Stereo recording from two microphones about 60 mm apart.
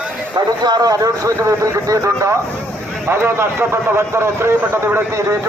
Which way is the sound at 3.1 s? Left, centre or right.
Right.